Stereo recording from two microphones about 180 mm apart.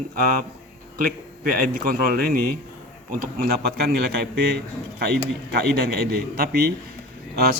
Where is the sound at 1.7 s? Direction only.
55° right (ahead or behind).